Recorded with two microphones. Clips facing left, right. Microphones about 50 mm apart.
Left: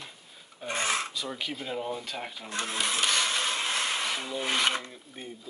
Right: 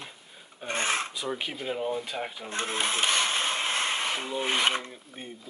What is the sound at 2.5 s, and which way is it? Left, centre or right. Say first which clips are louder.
Speech: right 1 dB; right.